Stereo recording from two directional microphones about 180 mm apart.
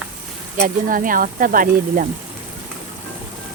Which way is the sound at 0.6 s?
50° right (ahead or behind).